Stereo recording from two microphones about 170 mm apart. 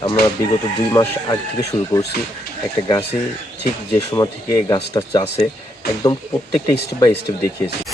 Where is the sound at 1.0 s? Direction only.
20° left (ahead or behind).